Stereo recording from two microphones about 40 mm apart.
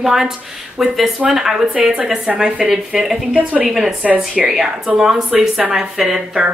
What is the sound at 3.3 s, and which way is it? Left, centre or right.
Speech, right.